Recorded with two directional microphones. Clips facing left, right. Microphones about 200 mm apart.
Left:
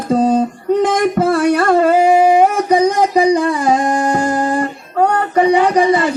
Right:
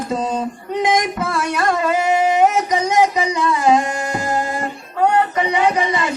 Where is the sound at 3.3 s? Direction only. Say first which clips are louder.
Left 2 dB; 55° left (ahead or behind).